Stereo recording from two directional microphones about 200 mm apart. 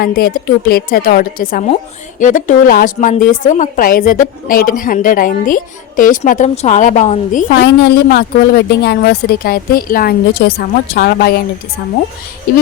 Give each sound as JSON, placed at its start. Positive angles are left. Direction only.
{"t": 0.0, "sound": "a woman's voice", "side_deg": 50}